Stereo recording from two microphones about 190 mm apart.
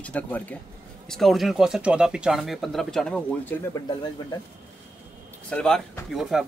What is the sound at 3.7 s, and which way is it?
Speech, 20° left (ahead or behind).